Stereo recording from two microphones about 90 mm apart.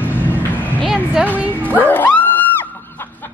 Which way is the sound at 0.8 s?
10° right (ahead or behind).